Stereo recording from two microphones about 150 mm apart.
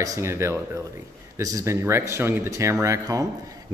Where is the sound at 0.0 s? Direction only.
20° right (ahead or behind).